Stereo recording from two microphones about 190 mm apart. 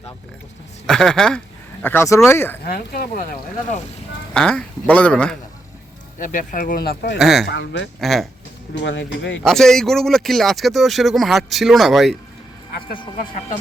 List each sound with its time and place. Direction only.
0.9 s speech: 5° left (ahead or behind)
2.6 s speech: 55° left (ahead or behind)
4.4 s speech: 5° left (ahead or behind)
6.1 s speech: 45° left (ahead or behind)
7.2 s speech: centre (ahead or behind)
7.4 s speech: 70° left (ahead or behind)
8.0 s speech: centre (ahead or behind)
8.8 s speech: 70° left (ahead or behind)
9.4 s speech: centre (ahead or behind)